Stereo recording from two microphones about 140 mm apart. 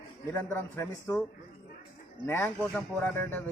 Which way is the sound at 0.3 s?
15° left (ahead or behind).